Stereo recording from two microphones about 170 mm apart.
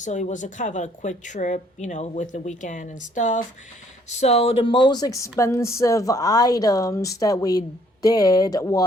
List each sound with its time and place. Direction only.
0.0 s a woman's voice: 45° left (ahead or behind); by 8.8 s 20° left (ahead or behind)